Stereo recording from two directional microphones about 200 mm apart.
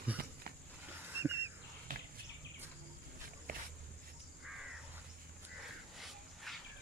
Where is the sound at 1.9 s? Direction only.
45° right (ahead or behind).